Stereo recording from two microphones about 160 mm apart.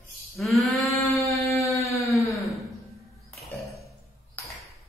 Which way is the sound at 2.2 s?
Centre (ahead or behind).